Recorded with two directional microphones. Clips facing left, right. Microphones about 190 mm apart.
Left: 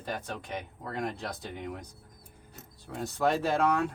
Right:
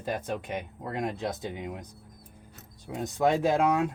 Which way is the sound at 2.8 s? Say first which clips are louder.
Right 3 dB; 15° right (ahead or behind).